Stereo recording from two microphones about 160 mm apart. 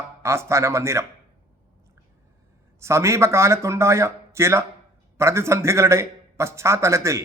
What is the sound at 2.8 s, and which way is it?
A man's voice, 15° right (ahead or behind).